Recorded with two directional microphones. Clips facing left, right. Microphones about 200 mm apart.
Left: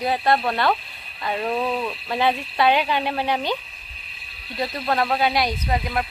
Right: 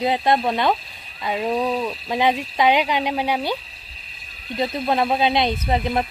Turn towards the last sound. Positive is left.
turn(degrees=-25)  # may be behind; listen again after turning